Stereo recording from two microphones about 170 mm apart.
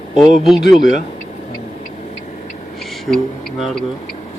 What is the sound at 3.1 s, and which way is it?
Speech, centre (ahead or behind).